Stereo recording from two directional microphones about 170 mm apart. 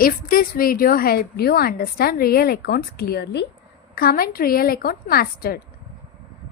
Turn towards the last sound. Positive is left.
turn(degrees=60)  # may be behind; listen again after turning